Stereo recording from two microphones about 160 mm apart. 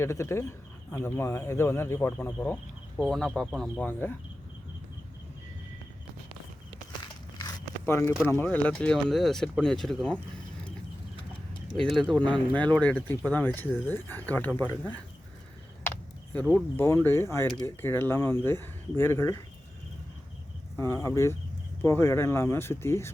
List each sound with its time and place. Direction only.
0.0 s speech: 20° left (ahead or behind)
7.0 s biting: 20° left (ahead or behind)
8.3 s speech: 10° left (ahead or behind)
11.9 s speech: 5° left (ahead or behind)
16.3 s speech: 10° left (ahead or behind)
20.7 s speech: 15° left (ahead or behind)